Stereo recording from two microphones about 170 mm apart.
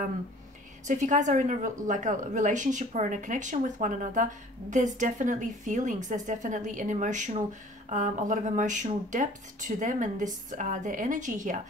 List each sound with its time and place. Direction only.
0.8 s a woman's voice: 45° right (ahead or behind)